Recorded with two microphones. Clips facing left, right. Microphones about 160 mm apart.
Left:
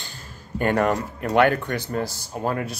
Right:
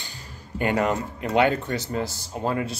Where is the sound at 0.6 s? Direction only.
55° left (ahead or behind).